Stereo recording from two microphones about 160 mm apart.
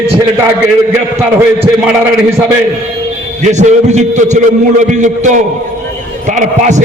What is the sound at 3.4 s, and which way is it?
A man's voice, 50° right (ahead or behind).